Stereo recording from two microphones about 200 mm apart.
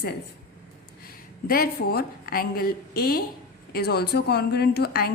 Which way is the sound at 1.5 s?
50° left (ahead or behind).